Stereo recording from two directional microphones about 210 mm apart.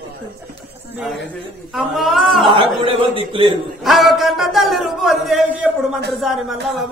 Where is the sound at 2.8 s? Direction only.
25° right (ahead or behind).